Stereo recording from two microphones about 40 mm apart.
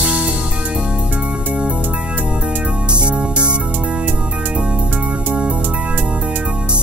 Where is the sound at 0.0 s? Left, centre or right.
Right.